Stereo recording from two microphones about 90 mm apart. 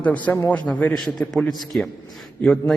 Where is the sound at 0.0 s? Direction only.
15° left (ahead or behind).